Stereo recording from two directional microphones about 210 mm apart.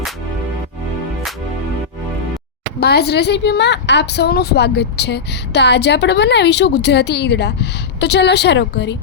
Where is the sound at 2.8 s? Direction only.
50° left (ahead or behind).